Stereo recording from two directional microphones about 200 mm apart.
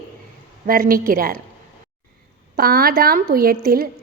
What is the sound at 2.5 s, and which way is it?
A woman's voice, 50° right (ahead or behind).